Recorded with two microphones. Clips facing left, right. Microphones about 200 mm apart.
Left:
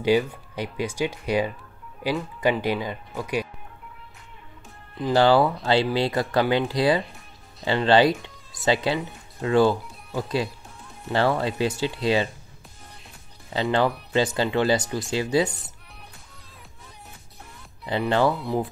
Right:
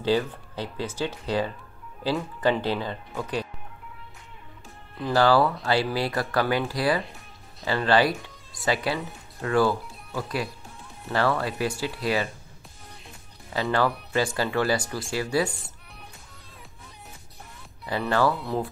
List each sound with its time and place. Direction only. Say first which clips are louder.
0.0 s speech: left 3 dB; 15° left (ahead or behind)
5.1 s speech: left 2 dB; 25° left (ahead or behind)
13.5 s speech: left 2 dB; 25° left (ahead or behind)
17.8 s speech: left 2 dB; 20° left (ahead or behind)